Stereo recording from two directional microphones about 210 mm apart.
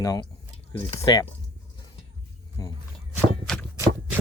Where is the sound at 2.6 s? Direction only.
15° left (ahead or behind).